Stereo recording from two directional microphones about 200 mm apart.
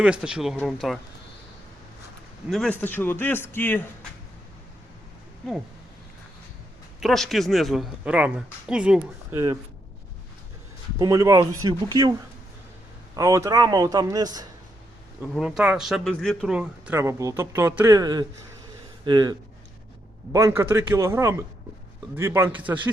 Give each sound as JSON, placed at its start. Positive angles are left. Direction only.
{"t": 0.0, "sound": "speech", "side_deg": -5}
{"t": 2.5, "sound": "a man's voice", "side_deg": 5}
{"t": 7.0, "sound": "speech", "side_deg": 0}
{"t": 9.3, "sound": "speech", "side_deg": -20}
{"t": 10.9, "sound": "speech", "side_deg": -15}
{"t": 13.1, "sound": "speech", "side_deg": -15}
{"t": 15.2, "sound": "speech", "side_deg": -5}